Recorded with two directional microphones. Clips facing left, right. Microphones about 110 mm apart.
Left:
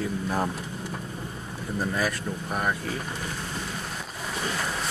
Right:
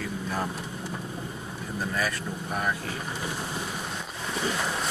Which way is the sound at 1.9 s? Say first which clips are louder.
Left 2 dB; 5° left (ahead or behind).